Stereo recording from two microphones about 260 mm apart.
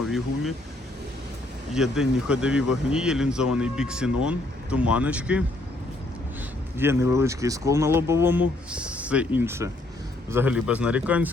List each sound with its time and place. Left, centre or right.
1.7 s speech: centre
6.7 s speech: centre